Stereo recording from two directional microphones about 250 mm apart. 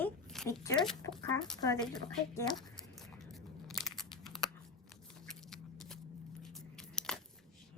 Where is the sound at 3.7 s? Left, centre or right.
Centre.